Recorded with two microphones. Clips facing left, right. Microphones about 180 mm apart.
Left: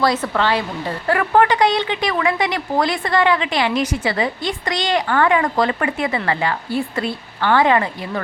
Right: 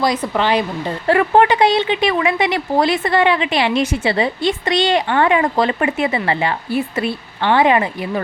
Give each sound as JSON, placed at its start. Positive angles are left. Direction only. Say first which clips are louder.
{"t": 0.0, "sound": "a woman's voice", "louder": "right 1 dB", "side_deg": -15}